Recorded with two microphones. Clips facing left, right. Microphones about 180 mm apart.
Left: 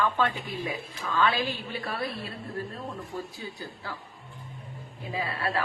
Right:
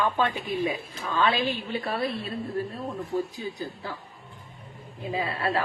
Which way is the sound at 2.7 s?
15° right (ahead or behind).